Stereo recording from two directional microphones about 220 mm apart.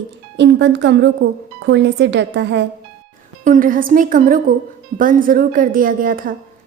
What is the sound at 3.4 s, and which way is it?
A woman's voice, 35° right (ahead or behind).